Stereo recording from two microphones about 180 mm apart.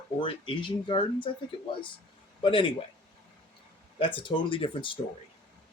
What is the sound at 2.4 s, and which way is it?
Speech, 30° left (ahead or behind).